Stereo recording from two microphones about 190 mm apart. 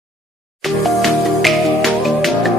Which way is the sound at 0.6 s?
Centre (ahead or behind).